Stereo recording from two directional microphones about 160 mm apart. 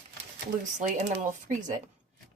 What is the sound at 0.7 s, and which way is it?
Speech, 50° right (ahead or behind).